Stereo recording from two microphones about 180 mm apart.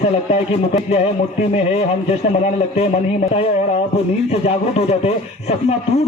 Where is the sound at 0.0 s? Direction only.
35° left (ahead or behind).